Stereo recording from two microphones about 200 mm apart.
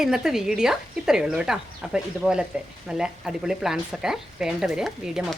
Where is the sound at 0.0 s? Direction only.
5° right (ahead or behind).